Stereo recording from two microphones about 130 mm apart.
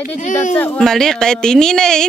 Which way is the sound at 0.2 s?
65° left (ahead or behind).